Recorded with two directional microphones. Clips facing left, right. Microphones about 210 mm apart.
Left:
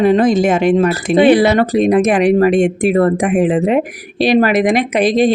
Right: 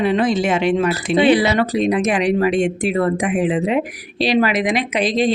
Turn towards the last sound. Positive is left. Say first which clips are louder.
# left 5 dB
turn(degrees=50)  # may be behind; listen again after turning